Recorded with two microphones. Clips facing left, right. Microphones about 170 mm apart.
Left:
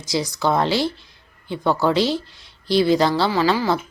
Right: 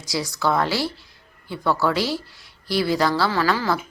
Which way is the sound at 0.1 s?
20° left (ahead or behind).